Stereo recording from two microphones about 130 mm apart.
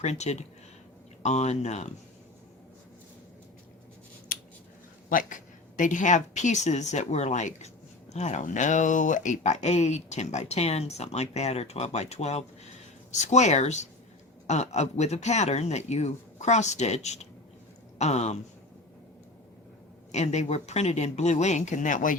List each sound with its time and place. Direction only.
0.0 s speech: 60° left (ahead or behind)
4.3 s scissors: 90° left
5.0 s speech: 85° left; by 18.3 s 60° left (ahead or behind)
20.1 s speech: 60° left (ahead or behind); by 22.1 s 80° left